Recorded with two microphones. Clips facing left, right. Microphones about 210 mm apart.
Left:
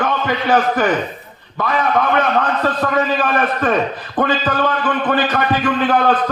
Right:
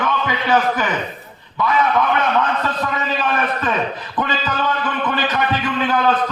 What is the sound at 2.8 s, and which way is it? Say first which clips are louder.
A man's voice: left 5 dB; 55° left (ahead or behind).